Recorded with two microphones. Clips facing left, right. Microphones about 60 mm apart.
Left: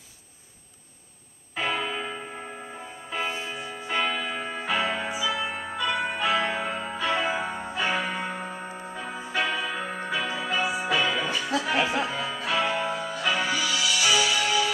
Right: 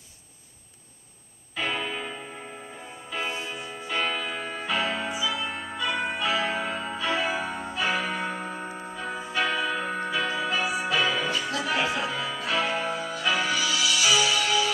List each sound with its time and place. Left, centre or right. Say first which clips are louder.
1.5 s music: left 1 dB; centre
3.1 s music: left 1 dB; left
3.9 s music: left 1 dB; centre
5.1 s music: left 1 dB; left
5.4 s music: left 1 dB; centre